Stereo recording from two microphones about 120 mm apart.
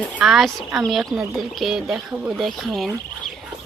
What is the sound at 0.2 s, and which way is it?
Speech, 5° right (ahead or behind).